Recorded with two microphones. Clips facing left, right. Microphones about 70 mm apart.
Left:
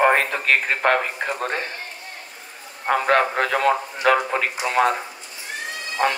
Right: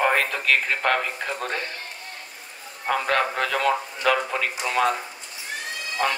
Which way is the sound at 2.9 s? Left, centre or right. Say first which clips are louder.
Left 4 dB; left.